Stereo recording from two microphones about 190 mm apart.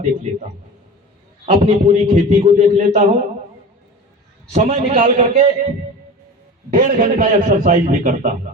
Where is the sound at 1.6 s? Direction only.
40° right (ahead or behind).